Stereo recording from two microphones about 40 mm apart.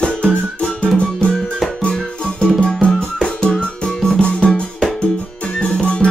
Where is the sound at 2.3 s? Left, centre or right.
Left.